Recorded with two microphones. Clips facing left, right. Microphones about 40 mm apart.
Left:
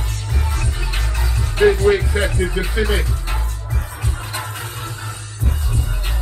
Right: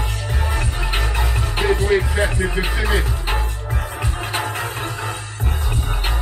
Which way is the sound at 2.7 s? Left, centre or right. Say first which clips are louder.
Left 1 dB; right.